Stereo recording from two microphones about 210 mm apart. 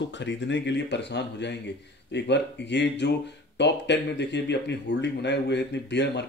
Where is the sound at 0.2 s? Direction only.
60° left (ahead or behind).